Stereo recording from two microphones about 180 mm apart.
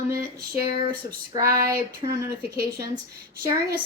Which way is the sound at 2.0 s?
35° right (ahead or behind).